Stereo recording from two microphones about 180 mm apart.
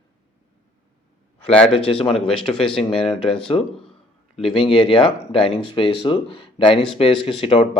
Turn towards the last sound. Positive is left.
turn(degrees=30)  # may be behind; listen again after turning